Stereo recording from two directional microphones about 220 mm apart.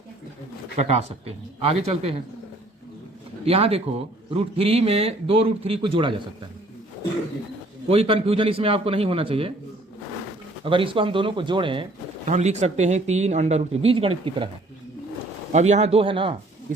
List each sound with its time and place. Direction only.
0.8 s speech: 30° right (ahead or behind)
3.4 s speech: 25° right (ahead or behind)
7.9 s speech: 25° right (ahead or behind)
10.6 s speech: 25° right (ahead or behind)
15.5 s speech: 30° right (ahead or behind)